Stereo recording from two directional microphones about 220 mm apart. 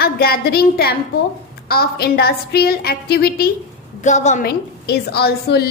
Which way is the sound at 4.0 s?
35° left (ahead or behind).